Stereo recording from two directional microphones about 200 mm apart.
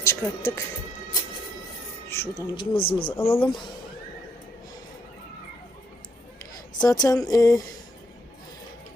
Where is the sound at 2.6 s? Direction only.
25° left (ahead or behind).